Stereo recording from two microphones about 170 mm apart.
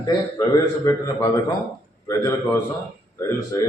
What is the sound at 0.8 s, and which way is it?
Speech, 20° left (ahead or behind).